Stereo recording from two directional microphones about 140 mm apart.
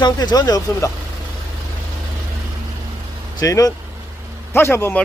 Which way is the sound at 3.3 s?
25° left (ahead or behind).